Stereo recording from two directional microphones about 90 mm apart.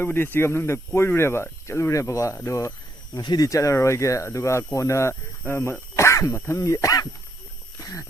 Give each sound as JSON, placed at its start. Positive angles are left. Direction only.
{"t": 0.0, "sound": "speech", "side_deg": 20}
{"t": 3.2, "sound": "speech", "side_deg": 45}
{"t": 7.8, "sound": "walk", "side_deg": 35}